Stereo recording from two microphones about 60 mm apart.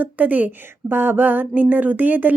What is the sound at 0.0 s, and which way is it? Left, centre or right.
Speech, right.